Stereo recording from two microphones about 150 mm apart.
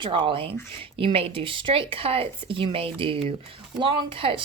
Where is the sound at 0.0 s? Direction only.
35° right (ahead or behind).